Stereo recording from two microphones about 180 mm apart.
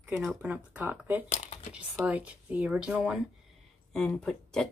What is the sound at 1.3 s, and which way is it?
Speech, 40° left (ahead or behind).